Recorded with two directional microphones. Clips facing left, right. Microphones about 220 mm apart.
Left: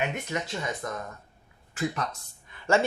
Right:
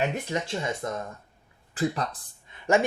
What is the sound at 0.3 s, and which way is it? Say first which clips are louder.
Speech: right 3 dB; 25° right (ahead or behind).